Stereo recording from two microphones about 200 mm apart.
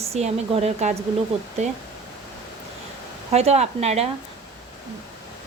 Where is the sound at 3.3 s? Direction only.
30° right (ahead or behind).